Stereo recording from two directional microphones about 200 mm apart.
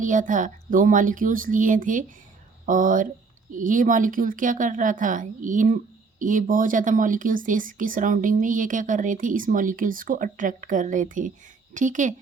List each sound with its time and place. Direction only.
0.0 s speech: 40° right (ahead or behind)